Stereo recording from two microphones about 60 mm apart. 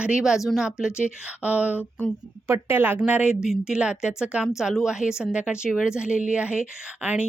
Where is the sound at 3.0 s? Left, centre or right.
Centre.